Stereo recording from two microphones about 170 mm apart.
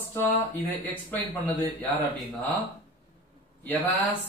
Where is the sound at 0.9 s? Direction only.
10° left (ahead or behind).